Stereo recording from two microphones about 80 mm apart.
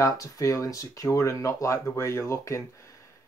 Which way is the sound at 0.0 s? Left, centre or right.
Left.